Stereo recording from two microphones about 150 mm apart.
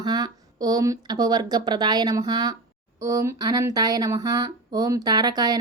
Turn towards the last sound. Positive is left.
turn(degrees=-25)  # may be behind; listen again after turning